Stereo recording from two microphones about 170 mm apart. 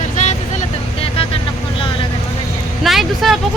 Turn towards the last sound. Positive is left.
turn(degrees=0)  # may be behind; listen again after turning